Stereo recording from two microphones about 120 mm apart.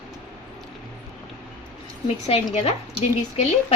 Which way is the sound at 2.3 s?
55° left (ahead or behind).